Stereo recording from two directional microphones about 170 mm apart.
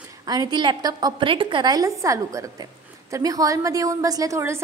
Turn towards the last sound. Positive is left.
turn(degrees=-15)  # may be behind; listen again after turning